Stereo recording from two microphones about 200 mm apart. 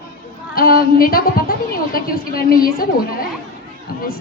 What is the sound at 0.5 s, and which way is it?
A woman's voice, 45° left (ahead or behind).